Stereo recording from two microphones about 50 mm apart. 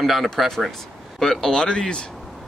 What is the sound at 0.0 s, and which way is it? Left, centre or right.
Speech, centre.